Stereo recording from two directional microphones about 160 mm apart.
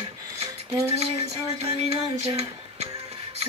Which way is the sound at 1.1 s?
40° right (ahead or behind).